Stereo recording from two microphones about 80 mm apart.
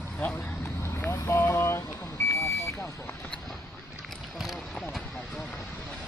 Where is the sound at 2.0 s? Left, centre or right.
Left.